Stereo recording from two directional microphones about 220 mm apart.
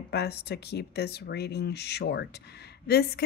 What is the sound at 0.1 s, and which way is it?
Speech, 45° left (ahead or behind).